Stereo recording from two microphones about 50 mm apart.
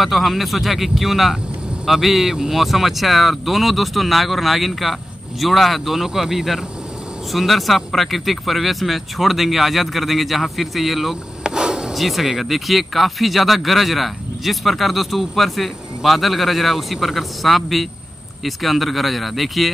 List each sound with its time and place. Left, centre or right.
0.0 s speech: centre
11.4 s rub: centre
11.9 s speech: centre